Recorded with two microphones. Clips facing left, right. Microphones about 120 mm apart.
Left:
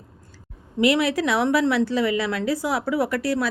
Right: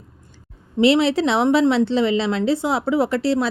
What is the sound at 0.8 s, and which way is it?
A woman's voice, 25° right (ahead or behind).